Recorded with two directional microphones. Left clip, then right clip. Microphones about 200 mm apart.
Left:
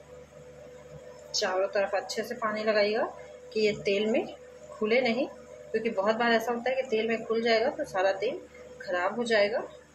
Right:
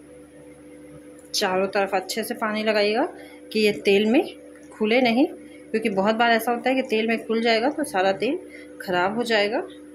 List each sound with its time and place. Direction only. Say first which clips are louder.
1.3 s speech: right 5 dB; 50° right (ahead or behind)